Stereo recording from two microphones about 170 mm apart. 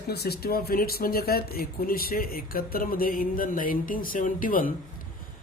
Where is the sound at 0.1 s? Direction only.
70° left (ahead or behind).